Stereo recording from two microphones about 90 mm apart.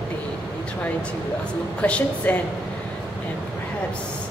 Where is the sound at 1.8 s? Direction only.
15° left (ahead or behind).